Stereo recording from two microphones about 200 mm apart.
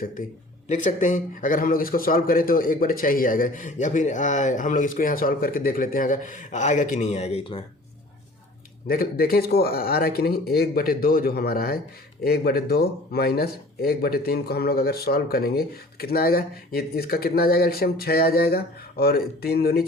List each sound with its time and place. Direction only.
0.7 s a man's voice: 40° left (ahead or behind)
8.9 s speech: 45° left (ahead or behind)